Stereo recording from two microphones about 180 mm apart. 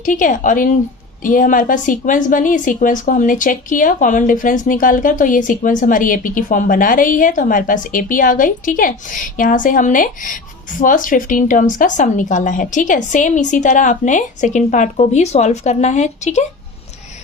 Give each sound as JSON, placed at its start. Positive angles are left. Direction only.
{"t": 0.0, "sound": "a woman's voice", "side_deg": 45}